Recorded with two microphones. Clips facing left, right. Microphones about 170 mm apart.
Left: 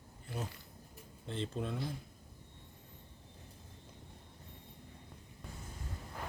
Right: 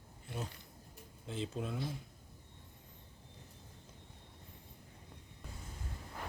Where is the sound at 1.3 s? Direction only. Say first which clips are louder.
Left 1 dB; centre (ahead or behind).